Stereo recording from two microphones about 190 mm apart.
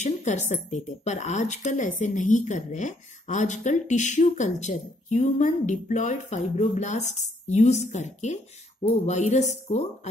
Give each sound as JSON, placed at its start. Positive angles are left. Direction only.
{"t": 0.0, "sound": "speech", "side_deg": 40}